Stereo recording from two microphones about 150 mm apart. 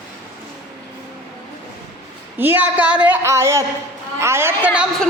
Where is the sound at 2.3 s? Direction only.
10° right (ahead or behind).